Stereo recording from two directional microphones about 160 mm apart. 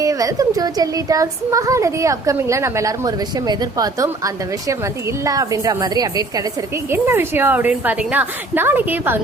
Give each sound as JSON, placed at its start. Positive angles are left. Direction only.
{"t": 0.0, "sound": "a child's voice", "side_deg": -20}